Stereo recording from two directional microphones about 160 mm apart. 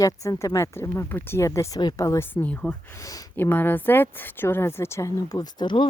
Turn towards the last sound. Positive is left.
turn(degrees=30)  # may be behind; listen again after turning